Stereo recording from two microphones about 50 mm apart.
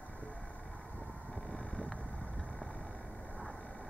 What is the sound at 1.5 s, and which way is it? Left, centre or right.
Vehicle, left.